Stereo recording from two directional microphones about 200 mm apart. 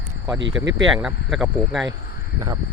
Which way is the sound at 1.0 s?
5° right (ahead or behind).